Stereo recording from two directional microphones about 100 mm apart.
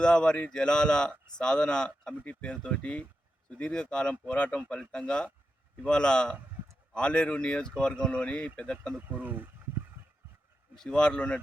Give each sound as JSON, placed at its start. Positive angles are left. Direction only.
{"t": 0.0, "sound": "speech", "side_deg": 10}
{"t": 9.0, "sound": "speech", "side_deg": -20}
{"t": 10.8, "sound": "speech", "side_deg": 10}